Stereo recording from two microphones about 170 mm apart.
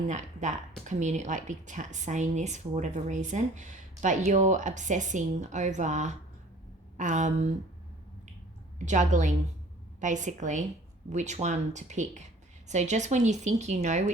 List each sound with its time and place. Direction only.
0.1 s speech: 45° right (ahead or behind)
8.8 s speech: 45° right (ahead or behind)